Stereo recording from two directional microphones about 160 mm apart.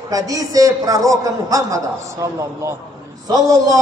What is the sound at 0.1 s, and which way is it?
A woman's voice, 20° right (ahead or behind).